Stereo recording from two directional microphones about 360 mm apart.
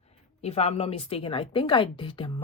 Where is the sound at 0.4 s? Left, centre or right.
Centre.